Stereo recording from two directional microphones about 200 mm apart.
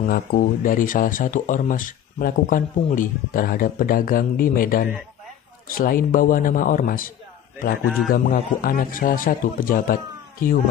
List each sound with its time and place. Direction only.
0.0 s speech: 45° left (ahead or behind)
8.1 s speech: 45° left (ahead or behind)